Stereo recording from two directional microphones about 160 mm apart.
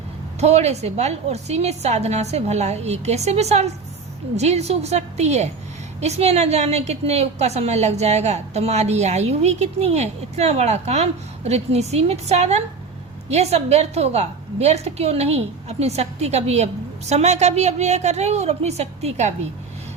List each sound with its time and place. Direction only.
0.3 s a woman's voice: 40° right (ahead or behind)